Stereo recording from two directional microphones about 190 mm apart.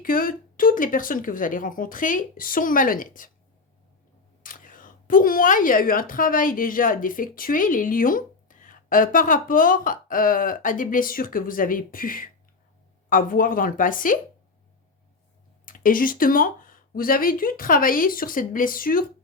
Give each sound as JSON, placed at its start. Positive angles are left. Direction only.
{"t": 0.0, "sound": "a woman's voice", "side_deg": 45}
{"t": 4.4, "sound": "a woman's voice", "side_deg": 45}
{"t": 15.6, "sound": "a woman's voice", "side_deg": 45}